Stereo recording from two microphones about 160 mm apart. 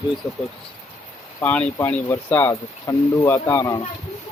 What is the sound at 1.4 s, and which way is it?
Speech, 10° left (ahead or behind).